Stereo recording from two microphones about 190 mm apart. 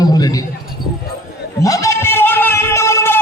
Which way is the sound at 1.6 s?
15° left (ahead or behind).